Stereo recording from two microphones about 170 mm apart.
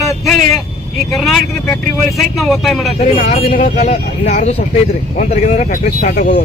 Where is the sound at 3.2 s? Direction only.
45° left (ahead or behind).